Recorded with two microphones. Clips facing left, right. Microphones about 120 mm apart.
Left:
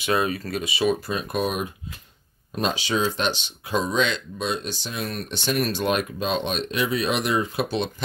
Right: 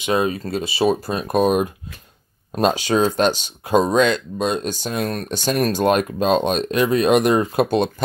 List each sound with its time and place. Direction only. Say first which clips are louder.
0.0 s speech: right 4 dB; 25° right (ahead or behind); by 7.9 s 45° right (ahead or behind)